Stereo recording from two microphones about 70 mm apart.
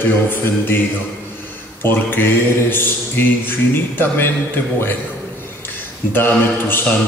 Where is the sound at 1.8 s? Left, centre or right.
Left.